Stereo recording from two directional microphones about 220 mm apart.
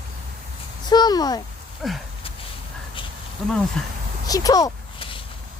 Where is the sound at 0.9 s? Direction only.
20° left (ahead or behind).